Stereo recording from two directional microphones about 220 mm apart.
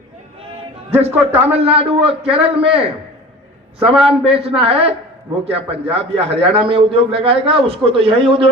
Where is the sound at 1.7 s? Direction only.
25° right (ahead or behind).